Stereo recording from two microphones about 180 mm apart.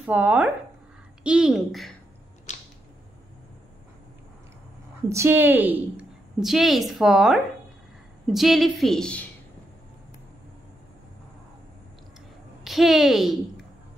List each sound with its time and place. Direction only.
0.0 s a woman's voice: 10° right (ahead or behind)
2.5 s a sound: 40° left (ahead or behind)
5.1 s a woman's voice: 15° right (ahead or behind); by 9.2 s 5° left (ahead or behind)
12.6 s a woman's voice: centre (ahead or behind)